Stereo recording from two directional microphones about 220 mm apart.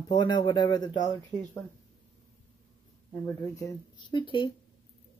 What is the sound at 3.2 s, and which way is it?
Speech, 15° left (ahead or behind).